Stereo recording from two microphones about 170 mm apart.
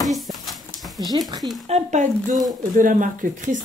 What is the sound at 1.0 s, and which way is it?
Speech, 25° right (ahead or behind).